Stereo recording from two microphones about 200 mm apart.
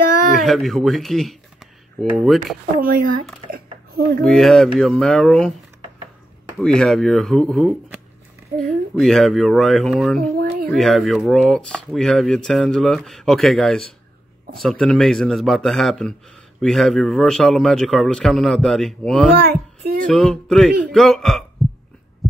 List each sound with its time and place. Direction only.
0.4 s speech: centre (ahead or behind)
2.8 s speech: 45° right (ahead or behind)
3.5 s a sound: 50° right (ahead or behind)
4.2 s speech: centre (ahead or behind)
6.6 s speech: 5° left (ahead or behind)
19.3 s a sound: 50° right (ahead or behind)
20.1 s speech: 5° left (ahead or behind)
22.2 s heart sounds: centre (ahead or behind)